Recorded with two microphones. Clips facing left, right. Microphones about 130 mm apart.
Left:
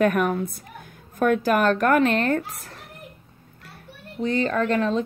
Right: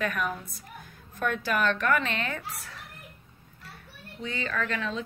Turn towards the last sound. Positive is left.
turn(degrees=40)  # may be behind; listen again after turning